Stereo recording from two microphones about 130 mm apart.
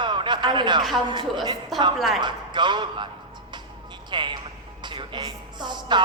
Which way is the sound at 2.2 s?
35° right (ahead or behind).